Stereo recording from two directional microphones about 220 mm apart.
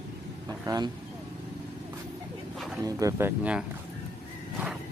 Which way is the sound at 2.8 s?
15° right (ahead or behind).